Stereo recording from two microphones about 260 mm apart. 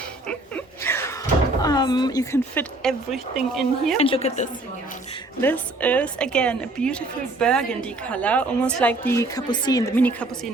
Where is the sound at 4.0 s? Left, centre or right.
Left.